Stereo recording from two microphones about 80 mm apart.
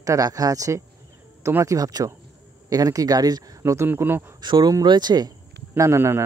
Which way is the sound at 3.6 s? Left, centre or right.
Right.